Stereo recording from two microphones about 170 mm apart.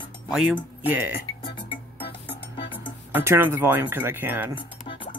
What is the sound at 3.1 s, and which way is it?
Speech, 15° right (ahead or behind).